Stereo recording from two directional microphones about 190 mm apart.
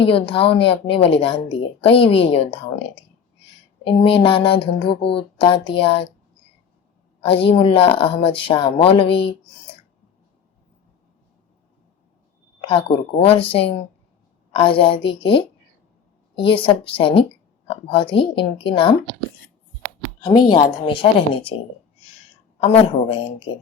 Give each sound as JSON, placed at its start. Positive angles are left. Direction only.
{"t": 0.0, "sound": "a woman's voice", "side_deg": 30}
{"t": 3.8, "sound": "a woman's voice", "side_deg": 30}
{"t": 7.2, "sound": "a woman's voice", "side_deg": 30}
{"t": 12.6, "sound": "a woman's voice", "side_deg": 30}
{"t": 20.2, "sound": "a woman's voice", "side_deg": 25}
{"t": 22.6, "sound": "speech", "side_deg": 30}